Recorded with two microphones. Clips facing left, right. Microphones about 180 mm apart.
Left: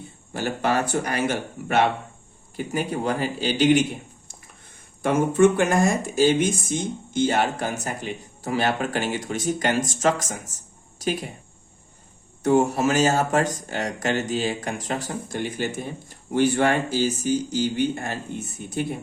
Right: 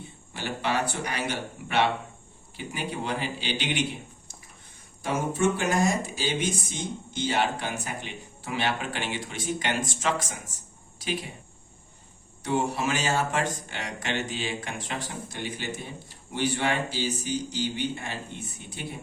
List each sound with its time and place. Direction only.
0.3 s speech: 45° left (ahead or behind)
5.0 s speech: 55° left (ahead or behind)
12.4 s speech: 45° left (ahead or behind)